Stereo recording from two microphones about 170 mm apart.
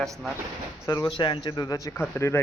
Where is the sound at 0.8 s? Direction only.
20° left (ahead or behind).